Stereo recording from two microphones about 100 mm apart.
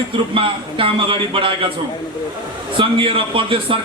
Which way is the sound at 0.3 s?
60° right (ahead or behind).